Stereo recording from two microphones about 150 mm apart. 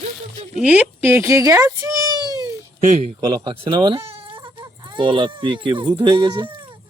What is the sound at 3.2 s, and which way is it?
Speech, 30° right (ahead or behind).